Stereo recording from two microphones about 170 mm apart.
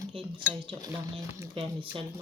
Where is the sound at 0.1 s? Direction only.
30° right (ahead or behind).